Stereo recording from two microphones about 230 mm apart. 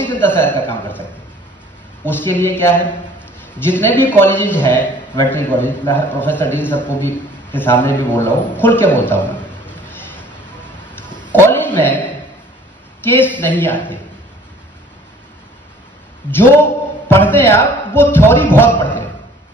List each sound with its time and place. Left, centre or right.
0.1 s a man's voice: centre
2.0 s a man's voice: centre
11.1 s a sound: centre
11.3 s a sound: centre
13.0 s a man's voice: centre
16.3 s a man's voice: centre